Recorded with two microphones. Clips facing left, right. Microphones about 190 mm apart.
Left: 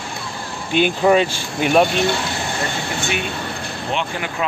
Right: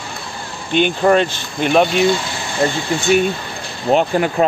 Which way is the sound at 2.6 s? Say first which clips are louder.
Right 12 dB; 30° right (ahead or behind).